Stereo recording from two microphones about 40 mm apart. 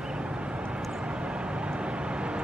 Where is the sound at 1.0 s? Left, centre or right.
Right.